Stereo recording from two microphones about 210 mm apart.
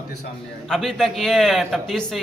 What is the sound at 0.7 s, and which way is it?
Speech, centre (ahead or behind).